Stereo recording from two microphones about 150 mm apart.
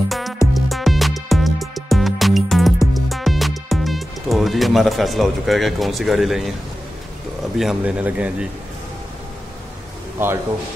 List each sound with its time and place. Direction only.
0.1 s music: centre (ahead or behind)
7.5 s speech: 5° right (ahead or behind)
10.1 s a man's voice: 15° right (ahead or behind)